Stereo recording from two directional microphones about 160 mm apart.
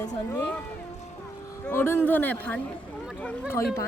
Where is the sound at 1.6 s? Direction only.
15° left (ahead or behind).